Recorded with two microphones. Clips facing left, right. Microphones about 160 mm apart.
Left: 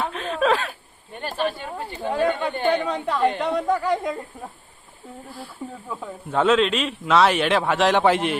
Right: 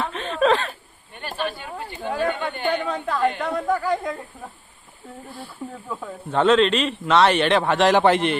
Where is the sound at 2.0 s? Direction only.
20° left (ahead or behind).